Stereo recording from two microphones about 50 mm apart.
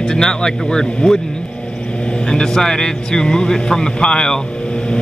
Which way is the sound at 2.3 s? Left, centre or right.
Centre.